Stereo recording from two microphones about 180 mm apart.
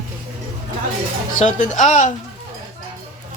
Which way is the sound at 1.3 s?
45° left (ahead or behind).